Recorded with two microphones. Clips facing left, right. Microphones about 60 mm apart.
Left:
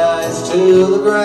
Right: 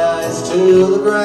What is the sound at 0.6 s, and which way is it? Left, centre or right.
Music, right.